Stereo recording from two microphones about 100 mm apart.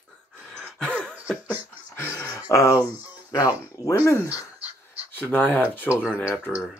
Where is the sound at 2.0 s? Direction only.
30° left (ahead or behind).